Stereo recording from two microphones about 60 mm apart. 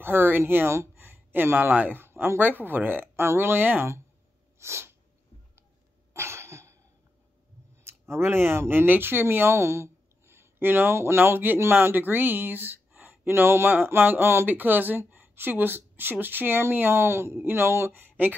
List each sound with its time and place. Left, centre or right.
0.0 s speech: right
3.2 s speech: right
4.6 s sneeze: right
6.1 s cough: right
7.8 s speech: right